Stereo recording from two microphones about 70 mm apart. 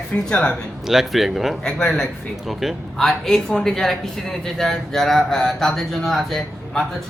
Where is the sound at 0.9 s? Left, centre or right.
Centre.